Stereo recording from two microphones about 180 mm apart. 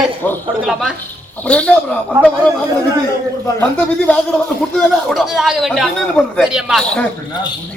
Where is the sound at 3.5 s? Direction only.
10° left (ahead or behind).